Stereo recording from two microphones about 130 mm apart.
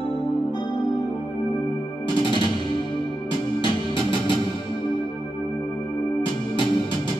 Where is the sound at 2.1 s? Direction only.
40° left (ahead or behind).